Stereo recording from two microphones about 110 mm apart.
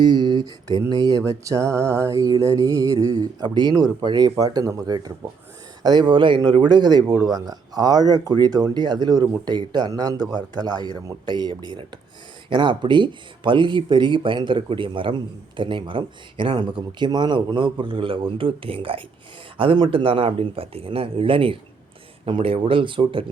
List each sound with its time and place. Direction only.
0.0 s music: 40° right (ahead or behind)
5.8 s speech: 40° right (ahead or behind)
7.3 s music: 35° right (ahead or behind)
12.5 s speech: 45° right (ahead or behind)